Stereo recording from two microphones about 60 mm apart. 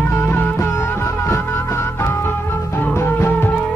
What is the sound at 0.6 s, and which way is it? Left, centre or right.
Music, left.